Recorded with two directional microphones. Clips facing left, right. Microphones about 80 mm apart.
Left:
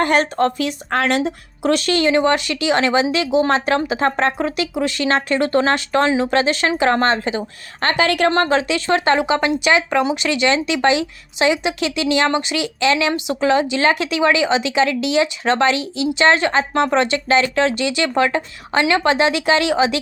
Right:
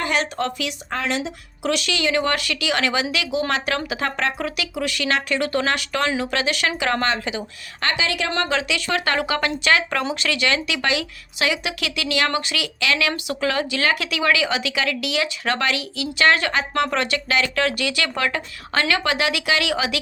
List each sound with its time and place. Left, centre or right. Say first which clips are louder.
0.0 s speech: left 7 dB; left
0.9 s speech: left 7 dB; left
1.6 s speech: left 6 dB; left
8.0 s a woman's voice: left 8 dB; left
8.3 s speech: left 6 dB; left